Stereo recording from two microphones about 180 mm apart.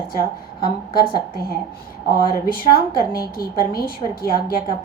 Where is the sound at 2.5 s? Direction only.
55° left (ahead or behind).